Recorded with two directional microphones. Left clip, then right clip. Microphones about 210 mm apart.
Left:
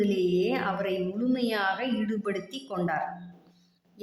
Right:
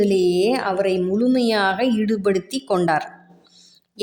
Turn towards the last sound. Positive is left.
turn(degrees=-40)  # may be behind; listen again after turning